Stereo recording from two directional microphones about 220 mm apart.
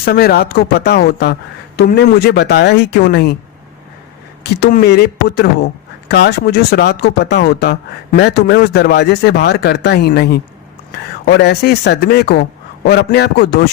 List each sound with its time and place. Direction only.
0.0 s speech: 45° left (ahead or behind)
4.6 s speech: 45° left (ahead or behind)